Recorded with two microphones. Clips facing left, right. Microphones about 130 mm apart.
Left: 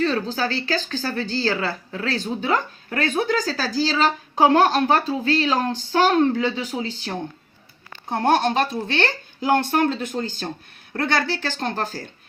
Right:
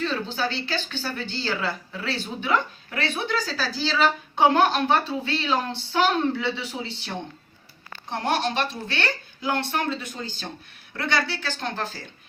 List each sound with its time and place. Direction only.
0.0 s speech: 40° left (ahead or behind)
8.1 s speech: 50° left (ahead or behind)